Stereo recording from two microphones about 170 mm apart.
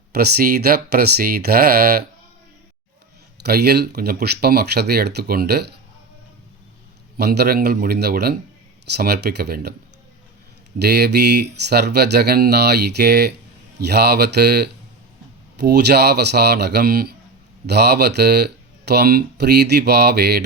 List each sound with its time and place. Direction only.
0.1 s speech: 65° right (ahead or behind)
3.4 s speech: 70° right (ahead or behind)
7.2 s speech: 70° right (ahead or behind)
10.8 s speech: 75° right (ahead or behind)